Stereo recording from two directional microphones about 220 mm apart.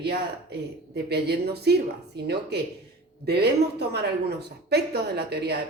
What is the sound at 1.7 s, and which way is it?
Speech, 50° right (ahead or behind).